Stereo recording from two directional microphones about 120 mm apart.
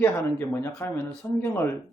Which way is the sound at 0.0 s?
20° left (ahead or behind).